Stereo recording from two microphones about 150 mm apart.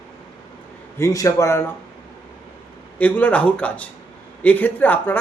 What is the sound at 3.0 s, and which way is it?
A man's voice, 10° left (ahead or behind).